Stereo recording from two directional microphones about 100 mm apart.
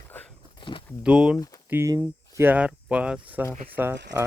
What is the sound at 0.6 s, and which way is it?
Speech, 55° left (ahead or behind).